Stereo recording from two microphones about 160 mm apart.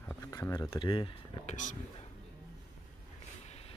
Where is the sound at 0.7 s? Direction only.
30° left (ahead or behind).